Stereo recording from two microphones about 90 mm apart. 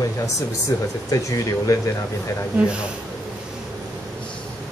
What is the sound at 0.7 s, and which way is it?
Speech, 40° left (ahead or behind).